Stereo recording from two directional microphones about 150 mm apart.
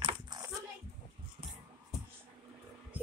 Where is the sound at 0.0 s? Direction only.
25° right (ahead or behind).